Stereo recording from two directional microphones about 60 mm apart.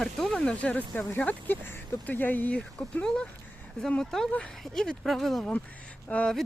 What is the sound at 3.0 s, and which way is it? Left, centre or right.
Speech, centre.